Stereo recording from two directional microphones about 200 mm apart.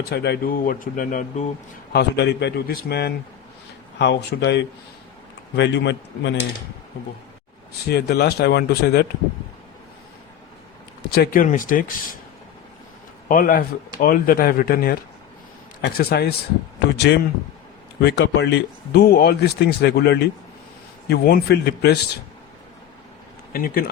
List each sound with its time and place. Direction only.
0.1 s speech: 55° left (ahead or behind)
1.9 s speech: 55° left (ahead or behind)
7.9 s speech: 55° left (ahead or behind)
11.1 s speech: 50° left (ahead or behind)
13.2 s speech: 45° left (ahead or behind)
18.0 s speech: 55° left (ahead or behind)
23.5 s speech: 45° left (ahead or behind)